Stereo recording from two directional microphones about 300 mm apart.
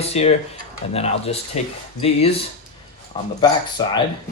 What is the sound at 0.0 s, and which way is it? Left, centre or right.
Speech, left.